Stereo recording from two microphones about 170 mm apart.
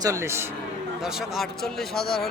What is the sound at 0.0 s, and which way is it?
Speech, 15° right (ahead or behind).